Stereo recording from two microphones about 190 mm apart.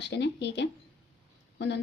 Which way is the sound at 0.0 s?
65° left (ahead or behind).